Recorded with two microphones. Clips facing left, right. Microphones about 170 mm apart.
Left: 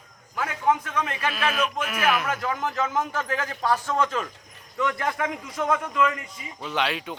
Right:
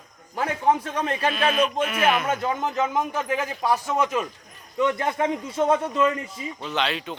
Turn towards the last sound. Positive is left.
turn(degrees=10)  # may be behind; listen again after turning